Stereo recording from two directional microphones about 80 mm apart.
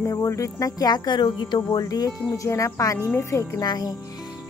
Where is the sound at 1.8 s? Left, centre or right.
Left.